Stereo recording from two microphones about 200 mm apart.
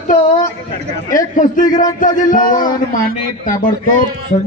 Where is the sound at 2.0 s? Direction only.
40° left (ahead or behind).